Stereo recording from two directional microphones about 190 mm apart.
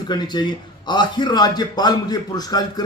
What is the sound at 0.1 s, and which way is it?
A man's voice, 20° left (ahead or behind).